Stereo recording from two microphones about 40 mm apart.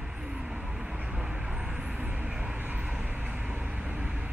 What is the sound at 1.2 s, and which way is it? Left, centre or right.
Vehicle, right.